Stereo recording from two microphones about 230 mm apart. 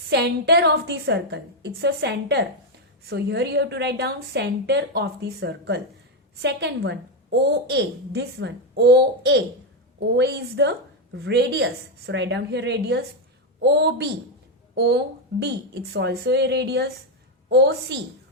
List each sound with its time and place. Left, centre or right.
0.1 s a woman's voice: right